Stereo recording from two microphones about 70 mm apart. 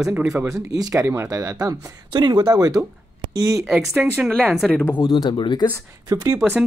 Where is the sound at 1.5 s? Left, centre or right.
Right.